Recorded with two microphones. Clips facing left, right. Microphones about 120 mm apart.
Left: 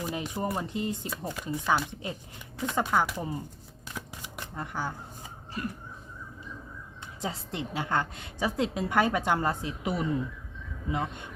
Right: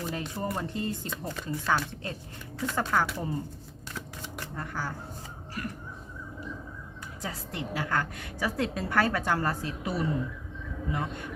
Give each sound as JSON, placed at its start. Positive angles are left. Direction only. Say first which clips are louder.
{"t": 0.0, "sound": "speech", "louder": "left 1 dB", "side_deg": 15}
{"t": 1.5, "sound": "speech", "louder": "left 1 dB", "side_deg": 20}
{"t": 3.9, "sound": "shuffling cards", "louder": "right 1 dB", "side_deg": 15}
{"t": 5.6, "sound": "a woman's voice", "louder": "left 2 dB", "side_deg": 25}
{"t": 7.2, "sound": "a woman's voice", "louder": "left 2 dB", "side_deg": 20}